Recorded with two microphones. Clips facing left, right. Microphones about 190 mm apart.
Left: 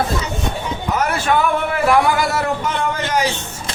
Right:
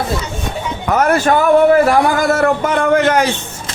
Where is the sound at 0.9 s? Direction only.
50° right (ahead or behind).